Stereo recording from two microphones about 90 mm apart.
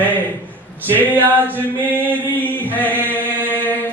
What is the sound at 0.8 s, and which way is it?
A capella, 20° right (ahead or behind).